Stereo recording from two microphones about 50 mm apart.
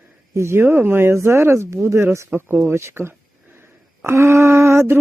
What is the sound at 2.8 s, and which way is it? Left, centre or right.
Speech, right.